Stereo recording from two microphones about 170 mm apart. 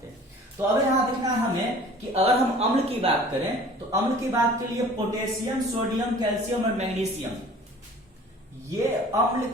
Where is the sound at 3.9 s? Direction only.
20° right (ahead or behind).